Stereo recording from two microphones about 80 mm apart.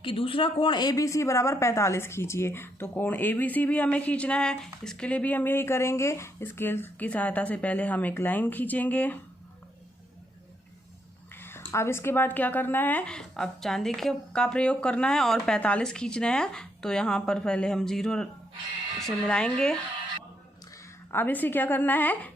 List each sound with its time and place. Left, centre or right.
0.0 s a man's voice: left
0.9 s a woman's voice: left
11.3 s speech: left
13.1 s speech: centre
21.1 s a woman's voice: left